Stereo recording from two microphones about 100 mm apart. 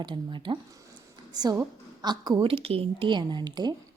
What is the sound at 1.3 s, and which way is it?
A woman's voice, 40° right (ahead or behind).